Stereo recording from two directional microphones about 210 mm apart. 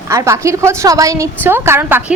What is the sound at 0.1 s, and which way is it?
A woman's voice, 15° right (ahead or behind).